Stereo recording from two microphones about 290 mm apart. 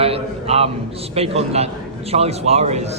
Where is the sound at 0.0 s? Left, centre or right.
Right.